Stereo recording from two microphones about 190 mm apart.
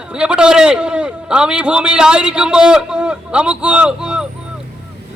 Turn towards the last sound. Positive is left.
turn(degrees=-5)  # may be behind; listen again after turning